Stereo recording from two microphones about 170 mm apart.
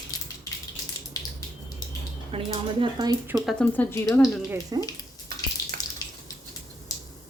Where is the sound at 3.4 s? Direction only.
5° left (ahead or behind).